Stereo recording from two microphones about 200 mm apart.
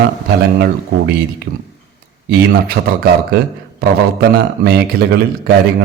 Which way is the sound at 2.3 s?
50° right (ahead or behind).